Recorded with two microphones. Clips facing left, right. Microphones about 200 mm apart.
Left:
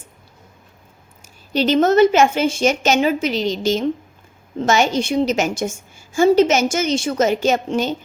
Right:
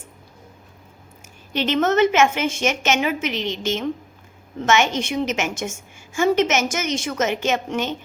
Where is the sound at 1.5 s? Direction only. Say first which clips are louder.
Left 5 dB; 35° left (ahead or behind).